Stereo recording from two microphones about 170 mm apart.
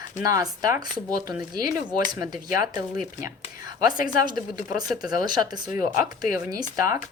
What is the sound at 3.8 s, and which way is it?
Speech, 25° right (ahead or behind).